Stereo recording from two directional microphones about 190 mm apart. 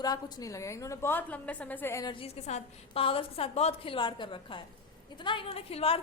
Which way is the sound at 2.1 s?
30° left (ahead or behind).